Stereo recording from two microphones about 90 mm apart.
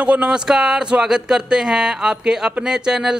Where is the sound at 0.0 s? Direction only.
10° right (ahead or behind).